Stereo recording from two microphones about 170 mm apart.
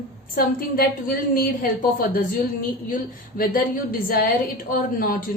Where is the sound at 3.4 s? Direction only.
55° left (ahead or behind).